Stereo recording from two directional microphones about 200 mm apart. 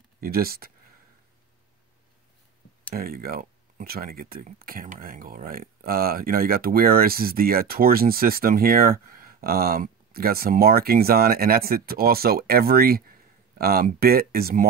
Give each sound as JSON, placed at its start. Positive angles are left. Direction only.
{"t": 0.2, "sound": "speech", "side_deg": -50}
{"t": 2.9, "sound": "speech", "side_deg": -50}